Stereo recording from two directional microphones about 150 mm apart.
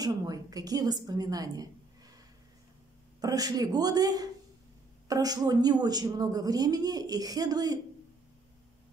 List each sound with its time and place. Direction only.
0.0 s speech: 25° right (ahead or behind)
3.2 s speech: 25° right (ahead or behind)